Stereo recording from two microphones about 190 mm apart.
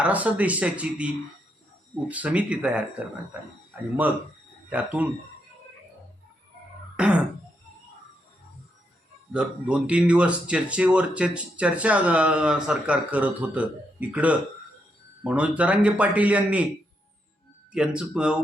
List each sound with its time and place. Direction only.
0.0 s speech: 10° right (ahead or behind)
4.7 s speech: 5° right (ahead or behind)
6.9 s music: 5° right (ahead or behind)
9.3 s speech: 5° right (ahead or behind)
17.7 s speech: 5° right (ahead or behind)